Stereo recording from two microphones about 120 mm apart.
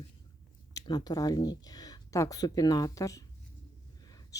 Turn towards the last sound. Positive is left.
turn(degrees=30)  # may be behind; listen again after turning